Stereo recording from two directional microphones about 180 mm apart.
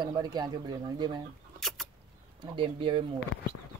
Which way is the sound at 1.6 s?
Centre (ahead or behind).